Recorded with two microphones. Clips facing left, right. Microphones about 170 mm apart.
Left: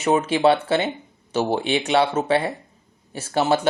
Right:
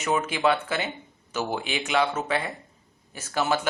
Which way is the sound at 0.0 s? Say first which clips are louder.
Left 6 dB; 35° left (ahead or behind).